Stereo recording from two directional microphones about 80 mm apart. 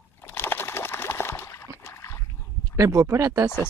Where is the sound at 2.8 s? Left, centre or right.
Right.